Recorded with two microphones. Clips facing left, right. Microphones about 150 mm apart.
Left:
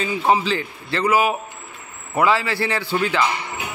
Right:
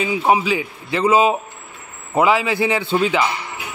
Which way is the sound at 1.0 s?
25° right (ahead or behind).